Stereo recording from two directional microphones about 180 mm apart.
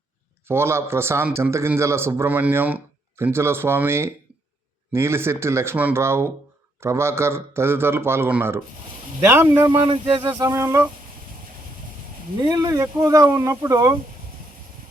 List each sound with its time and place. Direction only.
0.4 s a man's voice: 15° right (ahead or behind)
9.6 s speech: 25° right (ahead or behind)
10.3 s a man's voice: 15° right (ahead or behind)
12.4 s speech: 20° right (ahead or behind)